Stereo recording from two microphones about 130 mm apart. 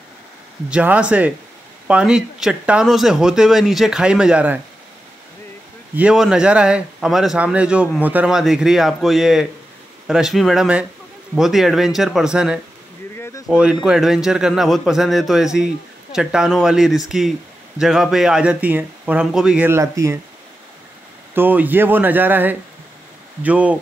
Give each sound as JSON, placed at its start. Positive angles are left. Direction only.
{"t": 0.7, "sound": "a man's voice", "side_deg": -10}
{"t": 5.9, "sound": "a man's voice", "side_deg": -5}
{"t": 13.1, "sound": "a sound", "side_deg": 20}
{"t": 13.5, "sound": "a man's voice", "side_deg": -10}
{"t": 19.7, "sound": "speech", "side_deg": -20}
{"t": 21.4, "sound": "speech", "side_deg": -15}